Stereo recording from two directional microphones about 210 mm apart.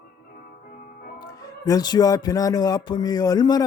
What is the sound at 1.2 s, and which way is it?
Speech, 20° left (ahead or behind).